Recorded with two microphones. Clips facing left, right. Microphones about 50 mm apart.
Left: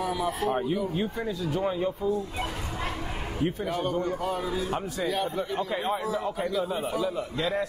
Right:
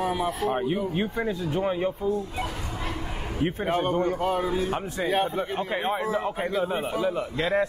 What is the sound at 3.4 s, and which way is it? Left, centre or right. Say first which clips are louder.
A man's voice: right 3 dB; right.